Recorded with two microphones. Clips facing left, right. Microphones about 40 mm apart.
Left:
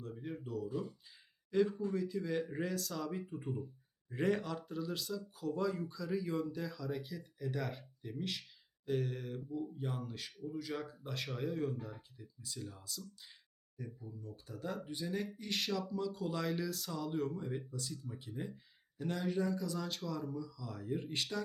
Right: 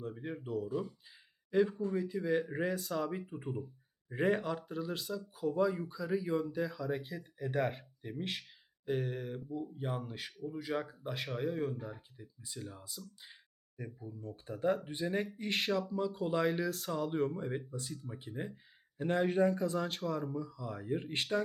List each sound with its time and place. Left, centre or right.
0.0 s speech: right
1.5 s speech: centre
7.3 s speech: right
8.9 s speech: centre
11.3 s speech: centre; by 13.0 s right
13.7 s speech: right
20.1 s speech: centre
20.3 s speech: right